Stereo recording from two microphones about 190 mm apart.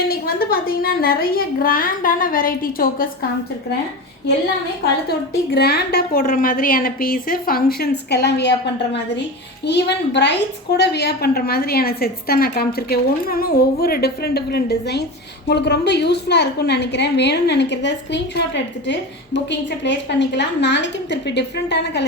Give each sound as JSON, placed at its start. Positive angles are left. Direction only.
{"t": 0.1, "sound": "a woman's voice", "side_deg": 50}
{"t": 5.5, "sound": "a woman's voice", "side_deg": 55}